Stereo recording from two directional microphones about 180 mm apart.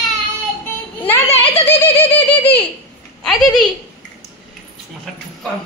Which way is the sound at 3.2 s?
Centre (ahead or behind).